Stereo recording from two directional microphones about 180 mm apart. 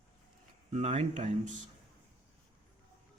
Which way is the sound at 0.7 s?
40° right (ahead or behind).